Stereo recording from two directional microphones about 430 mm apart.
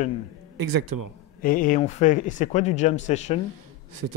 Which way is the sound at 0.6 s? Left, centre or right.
Right.